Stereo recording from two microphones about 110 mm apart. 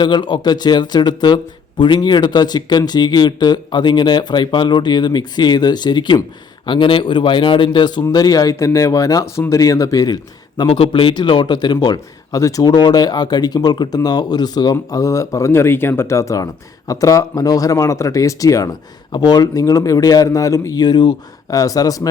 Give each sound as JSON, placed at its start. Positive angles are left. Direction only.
{"t": 0.0, "sound": "a man's voice", "side_deg": 45}
{"t": 10.7, "sound": "a man's voice", "side_deg": 55}